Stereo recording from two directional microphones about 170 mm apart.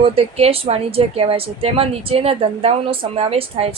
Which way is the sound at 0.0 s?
35° right (ahead or behind).